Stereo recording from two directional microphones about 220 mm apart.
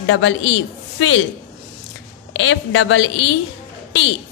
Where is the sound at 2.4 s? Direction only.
60° left (ahead or behind).